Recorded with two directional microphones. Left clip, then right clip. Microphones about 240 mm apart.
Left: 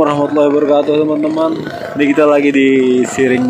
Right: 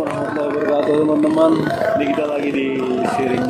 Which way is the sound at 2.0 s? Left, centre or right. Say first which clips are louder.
Left 9 dB; left.